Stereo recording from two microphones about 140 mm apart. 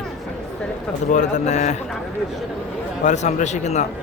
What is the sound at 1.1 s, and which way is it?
Speech, 60° left (ahead or behind).